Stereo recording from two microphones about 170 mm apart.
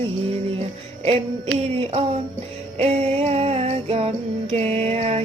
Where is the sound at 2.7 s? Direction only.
35° right (ahead or behind).